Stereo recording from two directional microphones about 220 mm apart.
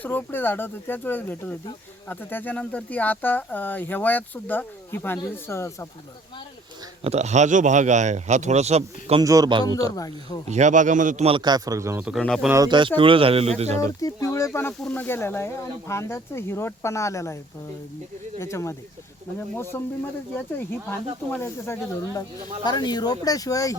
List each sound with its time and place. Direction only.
0.0 s speech: 10° left (ahead or behind)
7.0 s speech: 30° right (ahead or behind)
9.2 s speech: 15° right (ahead or behind)
9.9 s speech: 15° left (ahead or behind)
10.4 s a man's voice: 30° right (ahead or behind); by 12.5 s centre (ahead or behind)
12.5 s a man's voice: 15° right (ahead or behind)
14.0 s speech: 15° left (ahead or behind)
18.3 s speech: 10° left (ahead or behind)
21.2 s speech: 10° left (ahead or behind)